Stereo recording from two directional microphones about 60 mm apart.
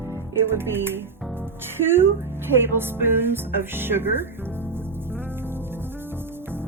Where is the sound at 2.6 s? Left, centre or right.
Right.